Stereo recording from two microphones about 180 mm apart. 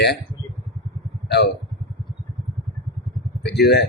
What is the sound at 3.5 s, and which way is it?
Speech, 65° left (ahead or behind).